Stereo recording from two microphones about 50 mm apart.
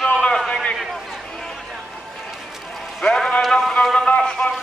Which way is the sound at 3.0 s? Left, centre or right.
Centre.